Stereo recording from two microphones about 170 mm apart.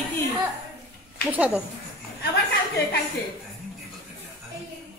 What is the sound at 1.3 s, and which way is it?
Speech, 10° right (ahead or behind).